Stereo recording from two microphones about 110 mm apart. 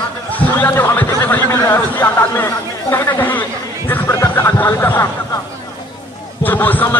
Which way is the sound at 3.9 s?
20° left (ahead or behind).